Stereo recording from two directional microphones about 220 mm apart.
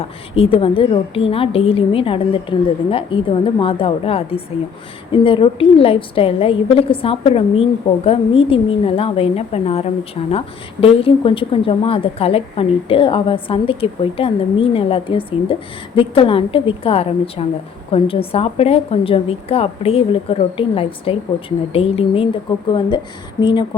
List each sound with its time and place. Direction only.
0.0 s a woman's voice: 25° left (ahead or behind)